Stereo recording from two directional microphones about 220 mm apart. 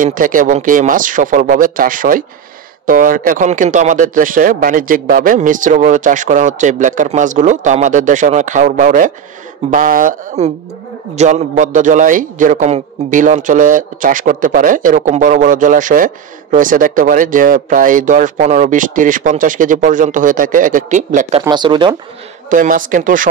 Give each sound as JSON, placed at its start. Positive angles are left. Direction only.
{"t": 0.0, "sound": "a man's voice", "side_deg": -40}
{"t": 21.4, "sound": "speech", "side_deg": -20}
{"t": 22.5, "sound": "a man's voice", "side_deg": -35}